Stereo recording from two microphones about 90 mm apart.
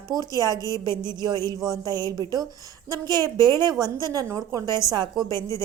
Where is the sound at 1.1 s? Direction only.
50° right (ahead or behind).